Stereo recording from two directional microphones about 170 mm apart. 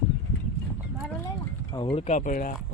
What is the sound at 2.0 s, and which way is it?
Speech, 45° left (ahead or behind).